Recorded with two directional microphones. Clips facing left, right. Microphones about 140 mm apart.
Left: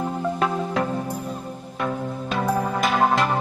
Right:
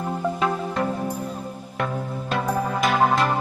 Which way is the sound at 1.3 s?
Centre (ahead or behind).